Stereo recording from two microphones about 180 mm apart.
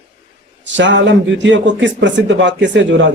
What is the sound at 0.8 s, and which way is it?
A man's voice, 85° right.